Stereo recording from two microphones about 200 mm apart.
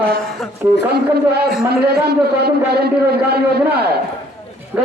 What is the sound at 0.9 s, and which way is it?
A man's voice, 55° right (ahead or behind).